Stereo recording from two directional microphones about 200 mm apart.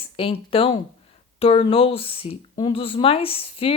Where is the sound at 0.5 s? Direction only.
30° left (ahead or behind).